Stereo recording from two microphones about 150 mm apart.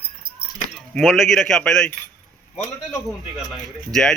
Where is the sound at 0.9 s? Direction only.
Centre (ahead or behind).